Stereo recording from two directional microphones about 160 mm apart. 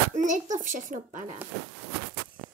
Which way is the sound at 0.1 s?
50° right (ahead or behind).